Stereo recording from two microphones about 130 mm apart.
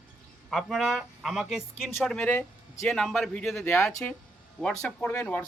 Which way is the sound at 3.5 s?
20° left (ahead or behind).